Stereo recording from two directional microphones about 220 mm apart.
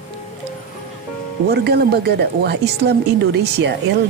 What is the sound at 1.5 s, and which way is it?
Speech, 45° right (ahead or behind).